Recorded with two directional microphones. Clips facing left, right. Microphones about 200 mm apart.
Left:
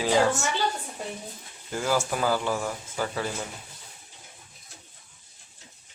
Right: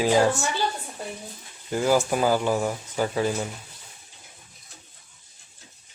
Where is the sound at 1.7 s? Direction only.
15° right (ahead or behind).